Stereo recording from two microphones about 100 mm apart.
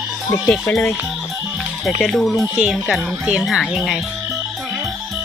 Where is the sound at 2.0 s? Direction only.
Centre (ahead or behind).